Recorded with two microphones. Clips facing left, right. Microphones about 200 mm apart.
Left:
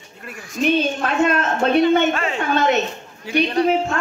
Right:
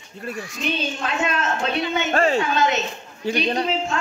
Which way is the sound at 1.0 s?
55° left (ahead or behind).